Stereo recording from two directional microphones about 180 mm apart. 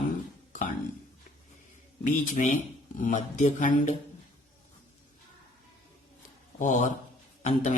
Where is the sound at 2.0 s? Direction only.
45° left (ahead or behind).